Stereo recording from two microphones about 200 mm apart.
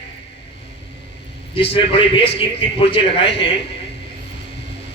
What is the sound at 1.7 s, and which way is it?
A man's voice, 25° left (ahead or behind).